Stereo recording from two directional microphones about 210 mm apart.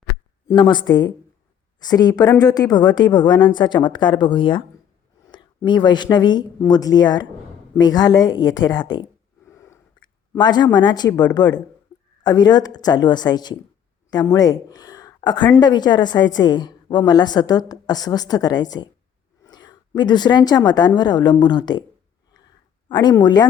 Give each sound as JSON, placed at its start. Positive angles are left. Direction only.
{"t": 0.4, "sound": "speech", "side_deg": 20}
{"t": 9.5, "sound": "wheeze", "side_deg": 15}
{"t": 10.3, "sound": "speech", "side_deg": 20}
{"t": 22.9, "sound": "speech", "side_deg": 20}